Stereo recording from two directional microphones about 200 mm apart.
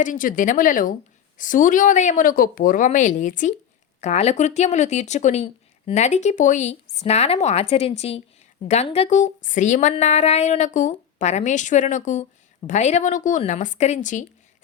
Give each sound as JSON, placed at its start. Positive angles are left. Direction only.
{"t": 0.0, "sound": "a woman's voice", "side_deg": 40}